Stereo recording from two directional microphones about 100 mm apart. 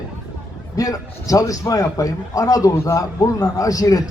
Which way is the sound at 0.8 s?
35° left (ahead or behind).